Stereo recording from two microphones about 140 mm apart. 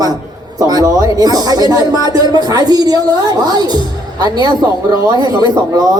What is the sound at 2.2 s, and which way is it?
A man's voice, 30° right (ahead or behind).